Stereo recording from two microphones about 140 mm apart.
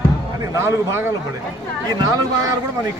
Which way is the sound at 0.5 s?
20° right (ahead or behind).